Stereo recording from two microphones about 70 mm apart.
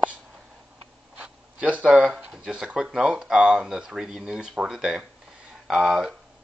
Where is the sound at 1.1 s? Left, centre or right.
Centre.